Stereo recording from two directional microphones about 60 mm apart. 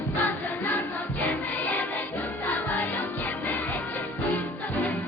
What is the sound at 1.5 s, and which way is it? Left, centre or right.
Music, left.